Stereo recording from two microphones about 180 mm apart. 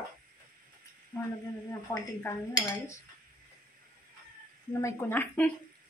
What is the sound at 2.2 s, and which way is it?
Speech, 15° left (ahead or behind).